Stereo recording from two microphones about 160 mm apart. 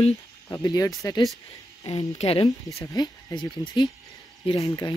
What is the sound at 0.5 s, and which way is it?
Speech, 20° left (ahead or behind).